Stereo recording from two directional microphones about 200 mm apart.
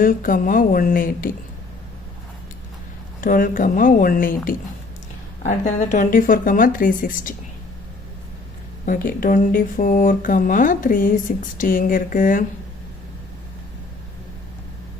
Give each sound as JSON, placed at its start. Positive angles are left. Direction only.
{"t": 0.0, "sound": "speech", "side_deg": 45}
{"t": 3.2, "sound": "speech", "side_deg": 45}
{"t": 8.9, "sound": "speech", "side_deg": 45}